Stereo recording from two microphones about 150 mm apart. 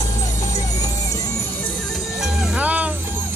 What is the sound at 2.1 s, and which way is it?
Music, 5° right (ahead or behind).